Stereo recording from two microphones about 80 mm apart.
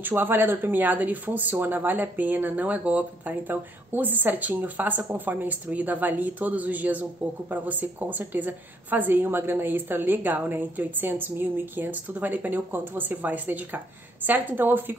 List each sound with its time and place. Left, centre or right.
0.0 s speech: right